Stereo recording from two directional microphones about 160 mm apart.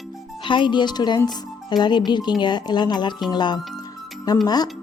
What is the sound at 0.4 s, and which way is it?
Speech, 30° left (ahead or behind).